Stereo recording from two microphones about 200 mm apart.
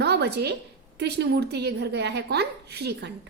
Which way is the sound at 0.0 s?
55° right (ahead or behind).